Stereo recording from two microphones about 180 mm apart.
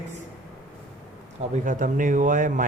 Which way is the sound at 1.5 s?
45° right (ahead or behind).